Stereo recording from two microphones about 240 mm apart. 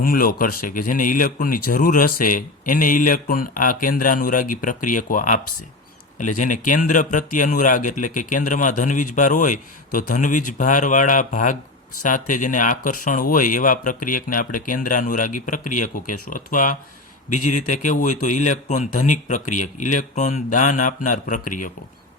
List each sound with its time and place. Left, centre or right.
0.0 s a man's voice: left